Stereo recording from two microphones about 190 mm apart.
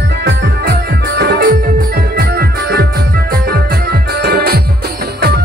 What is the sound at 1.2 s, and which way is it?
Music, 55° right (ahead or behind).